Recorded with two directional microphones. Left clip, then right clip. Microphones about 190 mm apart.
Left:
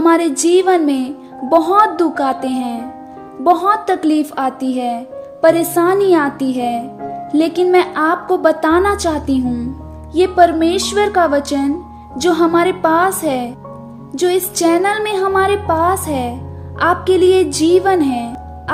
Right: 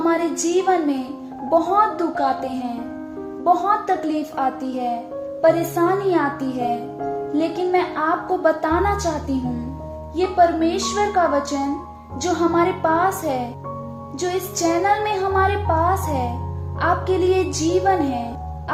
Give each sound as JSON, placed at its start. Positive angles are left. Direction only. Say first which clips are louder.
{"t": 0.0, "sound": "speech", "louder": "left 7 dB", "side_deg": 55}